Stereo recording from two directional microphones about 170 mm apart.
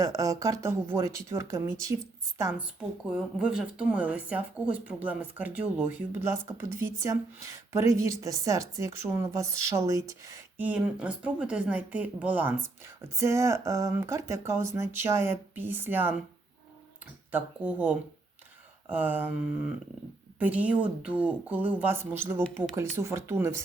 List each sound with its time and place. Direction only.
0.0 s speech: 20° right (ahead or behind)
6.7 s speech: 20° right (ahead or behind)
10.7 s speech: 5° right (ahead or behind)
17.3 s speech: 10° right (ahead or behind)
20.4 s speech: 10° right (ahead or behind)